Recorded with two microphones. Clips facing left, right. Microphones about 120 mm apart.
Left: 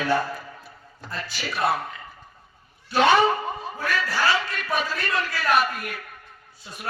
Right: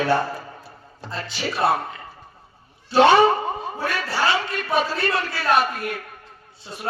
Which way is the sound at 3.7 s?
25° right (ahead or behind).